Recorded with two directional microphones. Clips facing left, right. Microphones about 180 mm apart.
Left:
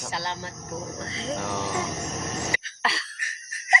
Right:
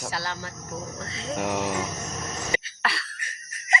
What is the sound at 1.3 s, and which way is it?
Speech, 15° right (ahead or behind).